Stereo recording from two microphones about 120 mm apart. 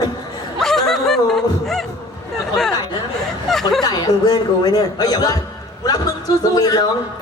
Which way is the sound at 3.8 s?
35° left (ahead or behind).